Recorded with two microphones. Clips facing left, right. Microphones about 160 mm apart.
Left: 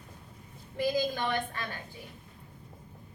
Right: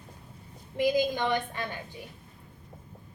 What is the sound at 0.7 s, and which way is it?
Speech, 20° right (ahead or behind).